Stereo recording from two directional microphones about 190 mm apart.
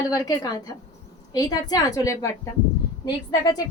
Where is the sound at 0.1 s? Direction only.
20° left (ahead or behind).